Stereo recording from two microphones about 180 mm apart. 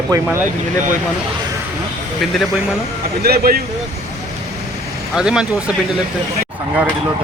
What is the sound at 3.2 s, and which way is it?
Speech, 55° right (ahead or behind).